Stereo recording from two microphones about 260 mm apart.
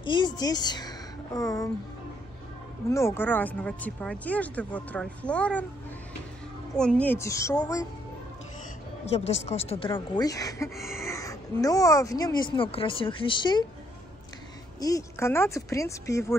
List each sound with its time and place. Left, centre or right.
0.0 s a woman's voice: centre
2.9 s speech: centre
6.8 s speech: centre
9.3 s a woman's voice: left
14.8 s speech: centre